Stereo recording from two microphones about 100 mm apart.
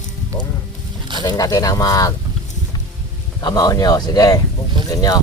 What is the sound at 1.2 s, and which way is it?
Speech, 40° left (ahead or behind).